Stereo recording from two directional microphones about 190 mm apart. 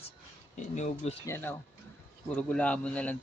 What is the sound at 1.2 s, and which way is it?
A man's voice, 10° left (ahead or behind).